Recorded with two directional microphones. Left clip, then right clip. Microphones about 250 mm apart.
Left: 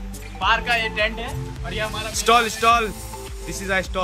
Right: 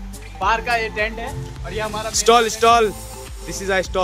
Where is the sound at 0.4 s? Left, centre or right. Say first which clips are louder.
Right 1 dB; centre.